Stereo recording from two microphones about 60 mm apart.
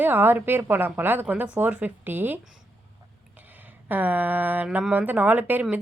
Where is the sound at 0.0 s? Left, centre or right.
Right.